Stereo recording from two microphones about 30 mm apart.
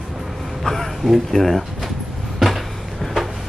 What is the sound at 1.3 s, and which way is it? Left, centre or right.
Speech, centre.